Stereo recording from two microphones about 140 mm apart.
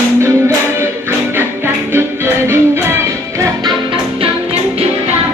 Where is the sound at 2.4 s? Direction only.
15° right (ahead or behind).